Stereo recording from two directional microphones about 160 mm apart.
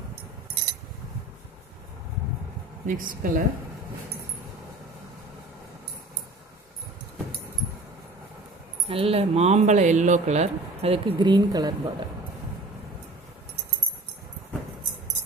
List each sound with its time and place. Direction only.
2.8 s a woman's voice: 55° right (ahead or behind)
8.9 s speech: 35° right (ahead or behind)